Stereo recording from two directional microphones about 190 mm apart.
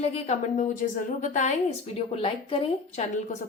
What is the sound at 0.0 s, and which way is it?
A woman's voice, 35° left (ahead or behind).